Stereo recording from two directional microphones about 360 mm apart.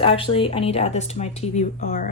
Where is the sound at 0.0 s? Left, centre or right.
Centre.